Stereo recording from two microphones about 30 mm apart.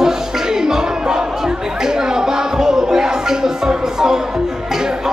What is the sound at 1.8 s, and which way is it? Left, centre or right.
Music, right.